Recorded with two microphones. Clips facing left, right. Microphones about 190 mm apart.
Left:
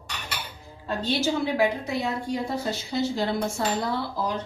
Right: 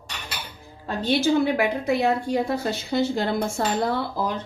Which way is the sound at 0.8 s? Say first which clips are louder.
Right 4 dB; 60° right (ahead or behind).